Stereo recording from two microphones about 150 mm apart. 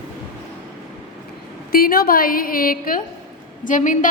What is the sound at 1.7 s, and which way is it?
A woman's voice, 80° left.